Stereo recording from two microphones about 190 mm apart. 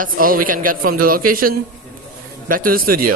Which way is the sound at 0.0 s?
50° right (ahead or behind).